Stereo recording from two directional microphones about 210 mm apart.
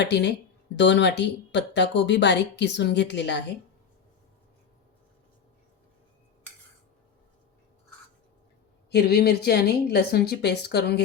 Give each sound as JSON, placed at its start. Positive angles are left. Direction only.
{"t": 0.0, "sound": "speech", "side_deg": 55}
{"t": 8.9, "sound": "speech", "side_deg": 50}